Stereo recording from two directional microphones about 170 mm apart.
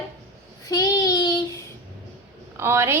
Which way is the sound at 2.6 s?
15° right (ahead or behind).